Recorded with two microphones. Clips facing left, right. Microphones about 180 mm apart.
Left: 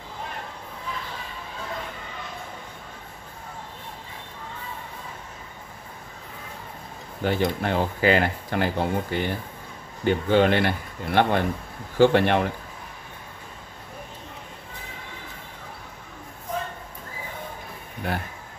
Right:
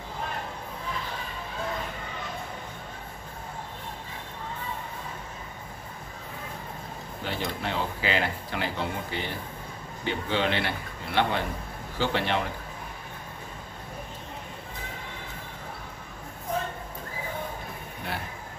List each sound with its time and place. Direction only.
7.2 s speech: 50° left (ahead or behind)